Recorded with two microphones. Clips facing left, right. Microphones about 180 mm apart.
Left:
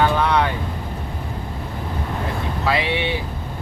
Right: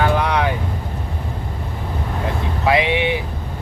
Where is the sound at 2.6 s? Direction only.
15° right (ahead or behind).